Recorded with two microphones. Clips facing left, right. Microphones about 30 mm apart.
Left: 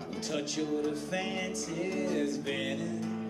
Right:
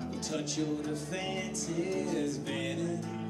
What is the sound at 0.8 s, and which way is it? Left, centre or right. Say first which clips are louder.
Music: left 3 dB; centre.